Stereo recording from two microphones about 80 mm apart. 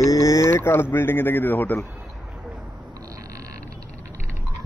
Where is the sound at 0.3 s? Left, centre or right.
Left.